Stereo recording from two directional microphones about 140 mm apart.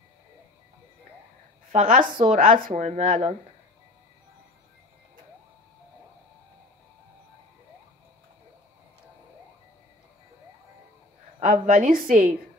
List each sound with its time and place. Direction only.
1.7 s speech: 65° right (ahead or behind)
11.4 s a woman's voice: 70° right (ahead or behind)